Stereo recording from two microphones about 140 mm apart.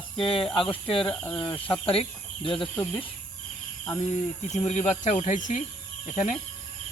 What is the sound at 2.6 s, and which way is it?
Speech, 5° left (ahead or behind).